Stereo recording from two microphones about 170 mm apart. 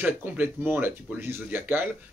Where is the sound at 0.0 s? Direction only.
10° right (ahead or behind).